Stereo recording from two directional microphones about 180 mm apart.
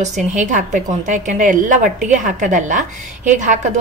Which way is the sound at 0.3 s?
45° right (ahead or behind).